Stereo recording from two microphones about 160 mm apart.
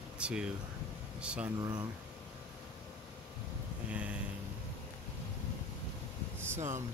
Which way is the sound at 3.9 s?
10° right (ahead or behind).